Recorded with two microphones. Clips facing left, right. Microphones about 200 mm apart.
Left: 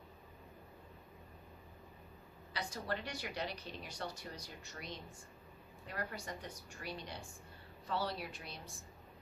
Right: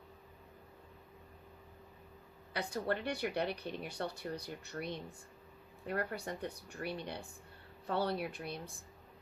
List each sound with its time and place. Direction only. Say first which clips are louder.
2.5 s speech: right 5 dB; 55° right (ahead or behind)